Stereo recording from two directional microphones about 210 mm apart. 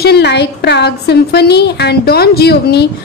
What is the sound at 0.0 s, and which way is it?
A woman's voice, 50° left (ahead or behind).